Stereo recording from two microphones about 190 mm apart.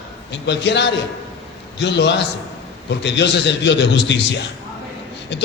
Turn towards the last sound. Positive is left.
turn(degrees=65)  # may be behind; listen again after turning